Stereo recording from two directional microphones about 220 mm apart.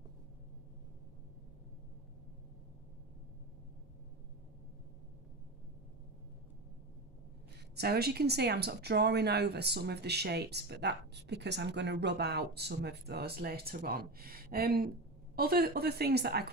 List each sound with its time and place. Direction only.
7.7 s speech: 45° right (ahead or behind)